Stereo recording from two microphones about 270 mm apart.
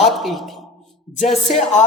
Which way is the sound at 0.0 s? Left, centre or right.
Centre.